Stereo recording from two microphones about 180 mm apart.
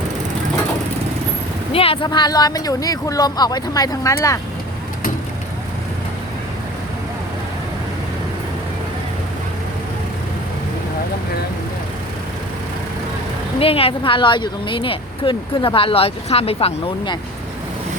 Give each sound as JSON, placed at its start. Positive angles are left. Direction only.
{"t": 1.7, "sound": "speech", "side_deg": 30}
{"t": 13.6, "sound": "speech", "side_deg": 30}